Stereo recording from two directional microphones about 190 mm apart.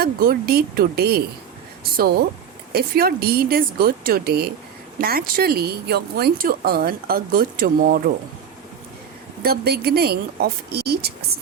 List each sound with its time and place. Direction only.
0.0 s speech: 55° right (ahead or behind)
9.4 s speech: 55° right (ahead or behind)